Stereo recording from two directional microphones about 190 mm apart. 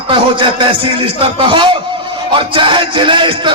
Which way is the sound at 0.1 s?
25° right (ahead or behind).